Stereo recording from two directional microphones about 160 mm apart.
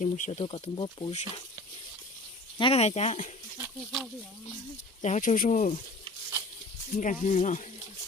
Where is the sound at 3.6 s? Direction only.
15° right (ahead or behind).